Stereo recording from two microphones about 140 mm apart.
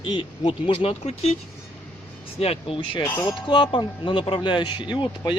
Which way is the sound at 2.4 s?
45° left (ahead or behind).